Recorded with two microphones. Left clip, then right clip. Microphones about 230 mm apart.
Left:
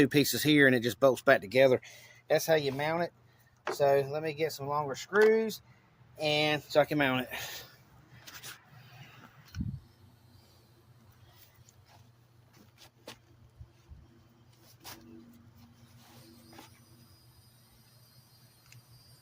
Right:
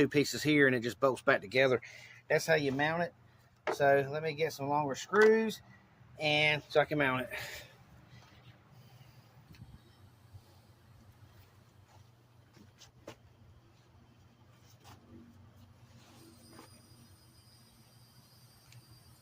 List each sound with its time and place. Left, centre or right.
0.0 s speech: left